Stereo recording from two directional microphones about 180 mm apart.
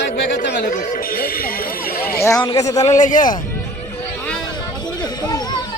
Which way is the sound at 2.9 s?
45° left (ahead or behind).